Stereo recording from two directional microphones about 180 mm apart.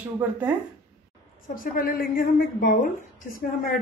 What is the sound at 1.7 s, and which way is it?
A woman's voice, 55° left (ahead or behind).